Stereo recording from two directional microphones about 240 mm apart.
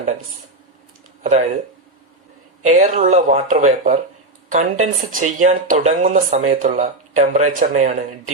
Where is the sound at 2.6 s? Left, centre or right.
Right.